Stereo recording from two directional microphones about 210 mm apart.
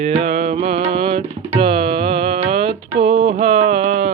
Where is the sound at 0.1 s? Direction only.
30° right (ahead or behind).